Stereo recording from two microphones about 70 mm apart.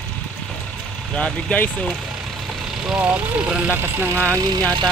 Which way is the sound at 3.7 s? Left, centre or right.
Right.